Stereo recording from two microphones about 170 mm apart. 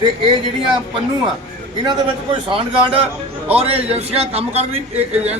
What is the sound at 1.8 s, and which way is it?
A man's voice, 30° right (ahead or behind).